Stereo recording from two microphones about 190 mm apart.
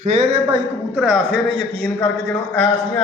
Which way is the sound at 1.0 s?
5° right (ahead or behind).